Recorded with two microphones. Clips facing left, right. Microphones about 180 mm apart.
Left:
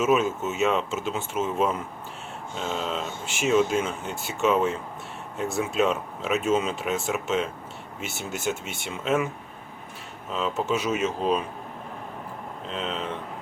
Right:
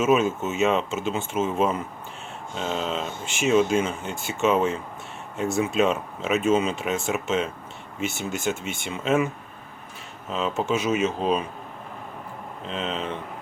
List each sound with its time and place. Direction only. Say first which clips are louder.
0.0 s speech: right 2 dB; centre (ahead or behind)
2.8 s speech: right 2 dB; centre (ahead or behind)
10.7 s speech: right 3 dB; 5° right (ahead or behind)
12.6 s speech: right 2 dB; centre (ahead or behind)